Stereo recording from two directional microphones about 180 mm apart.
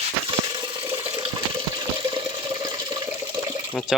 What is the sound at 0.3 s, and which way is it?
Water, 30° right (ahead or behind).